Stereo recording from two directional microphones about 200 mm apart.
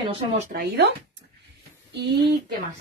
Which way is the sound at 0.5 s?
55° right (ahead or behind).